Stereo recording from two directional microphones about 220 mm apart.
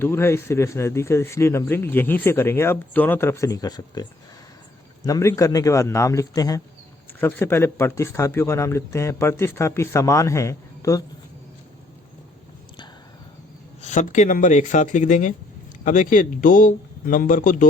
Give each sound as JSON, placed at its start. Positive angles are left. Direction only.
{"t": 0.0, "sound": "speech", "side_deg": 10}
{"t": 5.0, "sound": "speech", "side_deg": 15}
{"t": 13.8, "sound": "a man's voice", "side_deg": 35}